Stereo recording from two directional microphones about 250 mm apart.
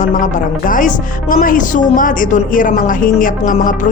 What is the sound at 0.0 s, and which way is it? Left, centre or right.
Speech, left.